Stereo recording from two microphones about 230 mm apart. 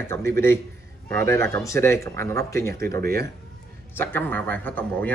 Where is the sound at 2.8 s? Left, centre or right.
Right.